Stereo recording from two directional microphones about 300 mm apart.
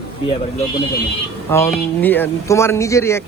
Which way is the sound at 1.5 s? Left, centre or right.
Centre.